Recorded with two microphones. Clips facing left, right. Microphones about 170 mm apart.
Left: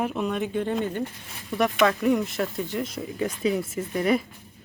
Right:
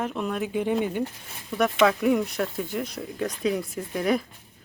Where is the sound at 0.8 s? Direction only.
10° right (ahead or behind).